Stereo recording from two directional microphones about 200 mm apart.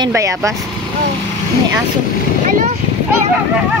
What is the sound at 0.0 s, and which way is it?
Speech, 15° right (ahead or behind).